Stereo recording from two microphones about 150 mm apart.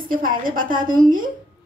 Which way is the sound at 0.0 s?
70° right (ahead or behind).